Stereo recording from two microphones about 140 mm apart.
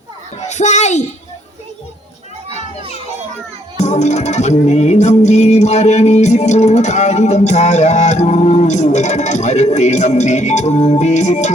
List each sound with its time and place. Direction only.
0.4 s a child's voice: 55° left (ahead or behind)
3.8 s music: 55° left (ahead or behind)